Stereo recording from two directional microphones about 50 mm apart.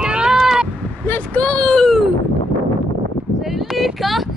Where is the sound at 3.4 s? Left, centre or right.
Centre.